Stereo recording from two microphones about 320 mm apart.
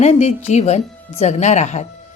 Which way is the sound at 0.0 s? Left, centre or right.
Left.